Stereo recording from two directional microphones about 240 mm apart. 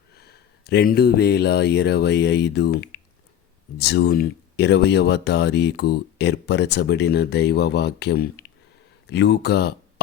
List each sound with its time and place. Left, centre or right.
0.2 s speech: left